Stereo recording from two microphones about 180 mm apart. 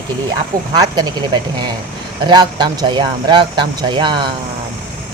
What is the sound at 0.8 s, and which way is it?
Speech, 25° right (ahead or behind).